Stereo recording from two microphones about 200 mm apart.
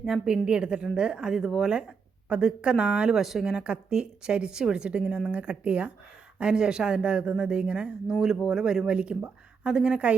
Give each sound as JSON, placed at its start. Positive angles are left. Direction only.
{"t": 0.0, "sound": "a woman's voice", "side_deg": 0}